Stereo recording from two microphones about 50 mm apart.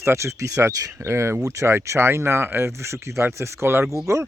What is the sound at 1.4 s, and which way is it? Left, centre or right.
Speech, right.